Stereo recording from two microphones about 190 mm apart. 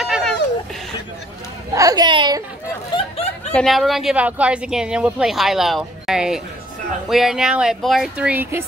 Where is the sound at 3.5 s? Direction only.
Centre (ahead or behind).